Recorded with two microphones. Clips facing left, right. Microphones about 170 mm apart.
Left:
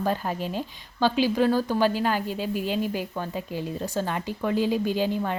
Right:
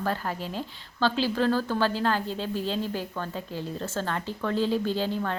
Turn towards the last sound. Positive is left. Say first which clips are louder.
# left 2 dB
turn(degrees=15)  # may be behind; listen again after turning